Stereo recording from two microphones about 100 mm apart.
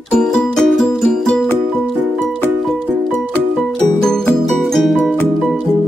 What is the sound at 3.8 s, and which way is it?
Music, 10° left (ahead or behind).